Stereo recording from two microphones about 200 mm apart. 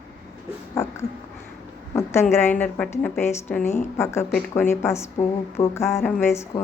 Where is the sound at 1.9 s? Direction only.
15° left (ahead or behind).